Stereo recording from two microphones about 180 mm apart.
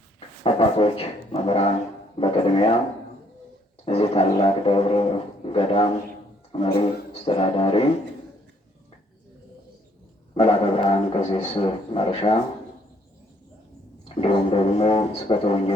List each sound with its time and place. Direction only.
0.4 s speech: 30° left (ahead or behind)
3.8 s speech: 35° left (ahead or behind)
10.3 s speech: 30° left (ahead or behind)
14.2 s speech: 30° left (ahead or behind)